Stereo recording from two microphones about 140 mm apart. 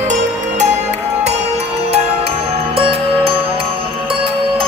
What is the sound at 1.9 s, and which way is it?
Music, 45° right (ahead or behind).